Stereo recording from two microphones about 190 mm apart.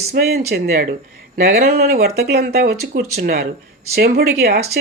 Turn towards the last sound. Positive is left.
turn(degrees=-55)  # may be behind; listen again after turning